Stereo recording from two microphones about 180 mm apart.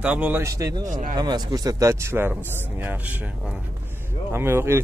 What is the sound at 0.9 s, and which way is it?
Speech, 45° right (ahead or behind).